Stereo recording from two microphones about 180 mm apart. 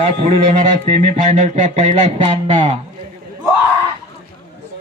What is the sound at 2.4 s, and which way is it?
Speech, 30° right (ahead or behind).